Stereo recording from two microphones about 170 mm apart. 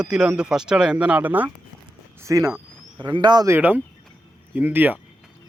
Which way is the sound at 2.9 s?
30° right (ahead or behind).